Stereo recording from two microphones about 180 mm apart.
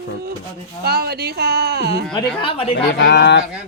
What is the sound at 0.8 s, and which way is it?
Speech, 60° right (ahead or behind).